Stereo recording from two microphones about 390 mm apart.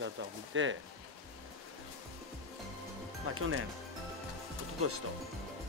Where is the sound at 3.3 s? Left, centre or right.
Right.